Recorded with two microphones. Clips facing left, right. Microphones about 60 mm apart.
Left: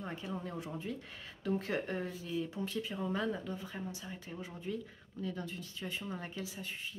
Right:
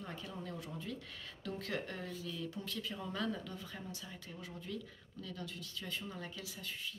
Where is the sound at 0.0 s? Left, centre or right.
Left.